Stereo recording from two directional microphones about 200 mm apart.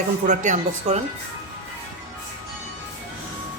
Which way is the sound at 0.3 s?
35° right (ahead or behind).